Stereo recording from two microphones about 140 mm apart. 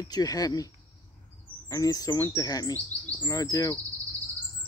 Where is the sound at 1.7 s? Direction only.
25° left (ahead or behind).